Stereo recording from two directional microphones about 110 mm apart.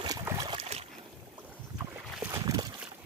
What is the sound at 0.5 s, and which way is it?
Boat, 80° right.